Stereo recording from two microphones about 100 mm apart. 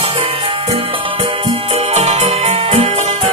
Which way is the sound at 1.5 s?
90° right.